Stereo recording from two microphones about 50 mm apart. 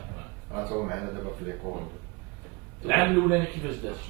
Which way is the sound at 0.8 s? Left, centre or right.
Centre.